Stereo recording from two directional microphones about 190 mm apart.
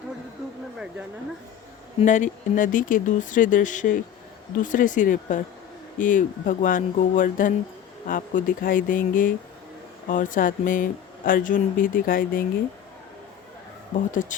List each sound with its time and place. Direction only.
2.0 s speech: 40° left (ahead or behind)
14.1 s speech: 40° left (ahead or behind)